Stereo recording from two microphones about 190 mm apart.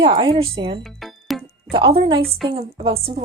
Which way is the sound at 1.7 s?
25° right (ahead or behind).